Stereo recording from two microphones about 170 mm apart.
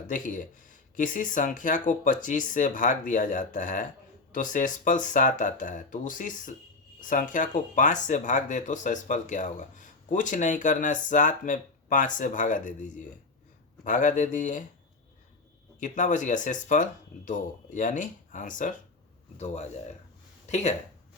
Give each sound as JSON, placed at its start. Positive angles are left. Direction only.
{"t": 0.1, "sound": "speech", "side_deg": 50}
{"t": 15.8, "sound": "speech", "side_deg": 45}